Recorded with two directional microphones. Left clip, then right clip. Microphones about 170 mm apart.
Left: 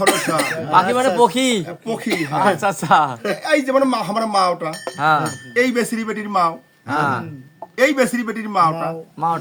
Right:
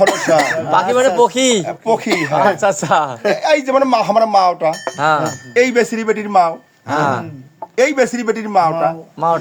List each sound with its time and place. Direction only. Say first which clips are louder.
0.0 s speech: right 5 dB; 5° right (ahead or behind)
0.7 s a woman's voice: even; 45° left (ahead or behind)
1.6 s speech: right 10 dB; 20° left (ahead or behind)
2.0 s speech: right 5 dB; centre (ahead or behind)
2.6 s a woman's voice: right 1 dB; 50° left (ahead or behind)
3.2 s speech: right 5 dB; 20° left (ahead or behind)
4.9 s a woman's voice: even; 45° left (ahead or behind)
5.5 s speech: right 5 dB; 20° left (ahead or behind)
6.8 s a woman's voice: right 3 dB; 50° left (ahead or behind)
7.8 s speech: right 2 dB; 20° left (ahead or behind)
9.2 s a woman's voice: right 5 dB; 45° left (ahead or behind)